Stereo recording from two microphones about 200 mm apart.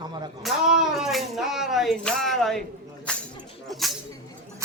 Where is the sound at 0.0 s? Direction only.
20° right (ahead or behind).